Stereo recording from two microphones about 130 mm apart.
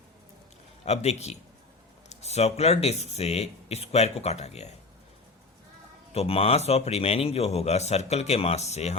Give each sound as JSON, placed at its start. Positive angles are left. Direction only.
{"t": 0.9, "sound": "speech", "side_deg": 55}
{"t": 6.1, "sound": "a man's voice", "side_deg": 50}